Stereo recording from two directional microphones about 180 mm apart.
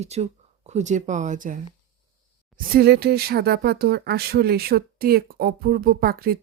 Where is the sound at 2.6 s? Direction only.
60° right (ahead or behind).